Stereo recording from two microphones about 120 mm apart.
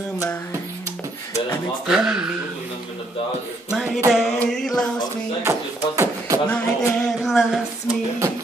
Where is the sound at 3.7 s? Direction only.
5° right (ahead or behind).